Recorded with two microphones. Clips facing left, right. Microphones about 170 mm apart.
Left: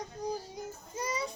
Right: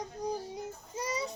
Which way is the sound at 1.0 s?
35° right (ahead or behind).